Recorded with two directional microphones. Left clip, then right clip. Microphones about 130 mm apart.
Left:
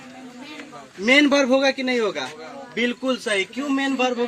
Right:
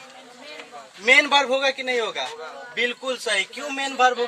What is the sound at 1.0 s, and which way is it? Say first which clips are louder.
A man's voice: even; 30° right (ahead or behind).